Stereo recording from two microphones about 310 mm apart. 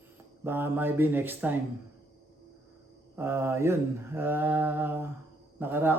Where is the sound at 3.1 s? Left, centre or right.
Centre.